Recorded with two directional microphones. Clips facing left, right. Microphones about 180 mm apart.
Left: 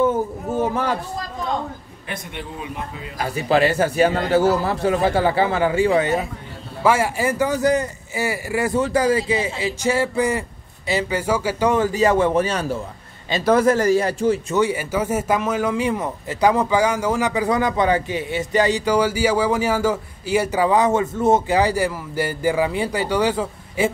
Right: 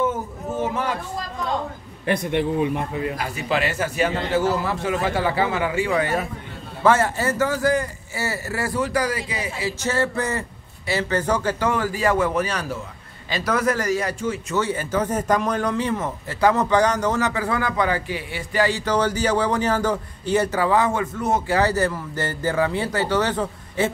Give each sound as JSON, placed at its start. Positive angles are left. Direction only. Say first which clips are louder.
{"t": 0.0, "sound": "a sound", "louder": "left 5 dB", "side_deg": 35}
{"t": 3.4, "sound": "a man's voice", "louder": "left 7 dB", "side_deg": 35}
{"t": 6.8, "sound": "speech", "louder": "even", "side_deg": 10}
{"t": 11.7, "sound": "a man's voice", "louder": "left 6 dB", "side_deg": 20}
{"t": 14.5, "sound": "speech", "louder": "left 3 dB", "side_deg": 15}
{"t": 21.5, "sound": "speech", "louder": "left 1 dB", "side_deg": 10}